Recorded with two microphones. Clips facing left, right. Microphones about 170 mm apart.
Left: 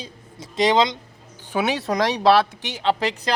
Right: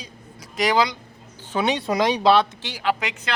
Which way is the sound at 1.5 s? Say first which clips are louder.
Even; 5° left (ahead or behind).